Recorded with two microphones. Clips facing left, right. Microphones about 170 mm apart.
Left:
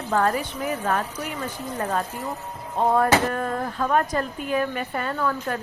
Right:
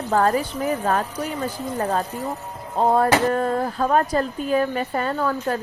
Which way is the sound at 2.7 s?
30° right (ahead or behind).